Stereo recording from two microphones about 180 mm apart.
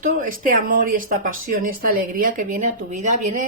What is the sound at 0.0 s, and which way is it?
Speech, 45° right (ahead or behind).